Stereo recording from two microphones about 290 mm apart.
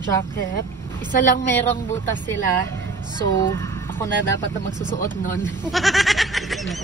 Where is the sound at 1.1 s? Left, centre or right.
Left.